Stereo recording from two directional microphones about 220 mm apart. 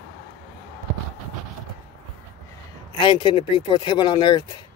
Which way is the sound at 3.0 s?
20° left (ahead or behind).